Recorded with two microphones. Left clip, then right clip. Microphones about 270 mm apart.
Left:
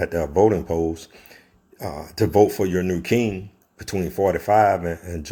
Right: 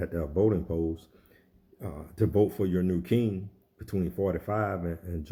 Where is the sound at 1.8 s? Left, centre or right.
Left.